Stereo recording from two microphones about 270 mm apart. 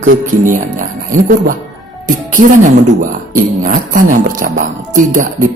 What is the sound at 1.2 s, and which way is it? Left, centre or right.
Music, right.